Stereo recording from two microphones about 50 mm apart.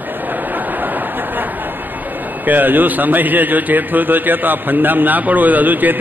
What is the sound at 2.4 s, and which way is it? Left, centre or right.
A man's voice, right.